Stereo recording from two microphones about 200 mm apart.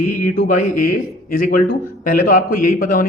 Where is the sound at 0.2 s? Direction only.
40° left (ahead or behind).